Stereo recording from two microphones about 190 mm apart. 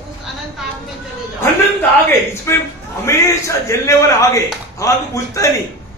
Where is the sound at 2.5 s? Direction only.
15° left (ahead or behind).